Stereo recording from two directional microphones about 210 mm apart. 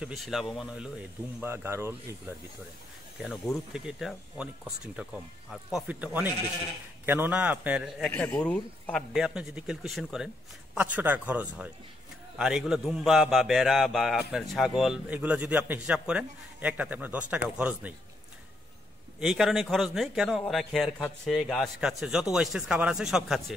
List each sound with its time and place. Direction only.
0.0 s a man's voice: centre (ahead or behind)
8.1 s a man's voice: 10° left (ahead or behind)
19.1 s a man's voice: centre (ahead or behind)